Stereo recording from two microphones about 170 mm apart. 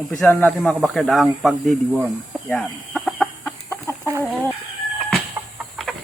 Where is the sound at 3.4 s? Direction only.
10° left (ahead or behind).